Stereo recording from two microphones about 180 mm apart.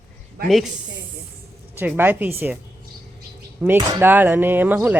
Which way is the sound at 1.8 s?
10° right (ahead or behind).